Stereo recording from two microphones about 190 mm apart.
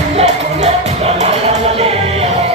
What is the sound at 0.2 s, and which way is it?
Music, 35° right (ahead or behind).